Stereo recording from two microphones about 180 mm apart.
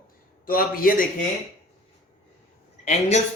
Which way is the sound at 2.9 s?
40° left (ahead or behind).